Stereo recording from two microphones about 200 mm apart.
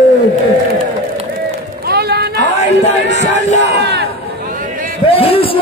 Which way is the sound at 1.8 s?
55° right (ahead or behind).